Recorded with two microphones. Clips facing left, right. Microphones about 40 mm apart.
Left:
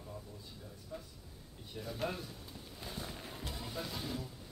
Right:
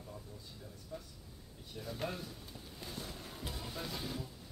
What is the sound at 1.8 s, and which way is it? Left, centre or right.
Speech, centre.